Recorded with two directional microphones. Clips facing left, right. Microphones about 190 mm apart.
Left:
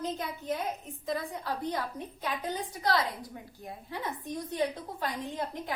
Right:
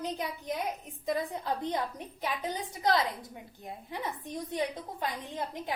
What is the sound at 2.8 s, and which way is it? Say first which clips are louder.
A woman's voice: right 2 dB; 20° right (ahead or behind).